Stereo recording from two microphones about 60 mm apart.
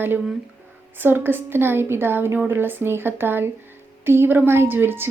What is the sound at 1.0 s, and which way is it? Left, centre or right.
A woman's voice, right.